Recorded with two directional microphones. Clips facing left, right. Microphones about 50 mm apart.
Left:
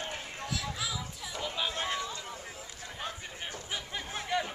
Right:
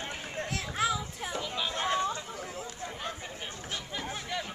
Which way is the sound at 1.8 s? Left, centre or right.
Right.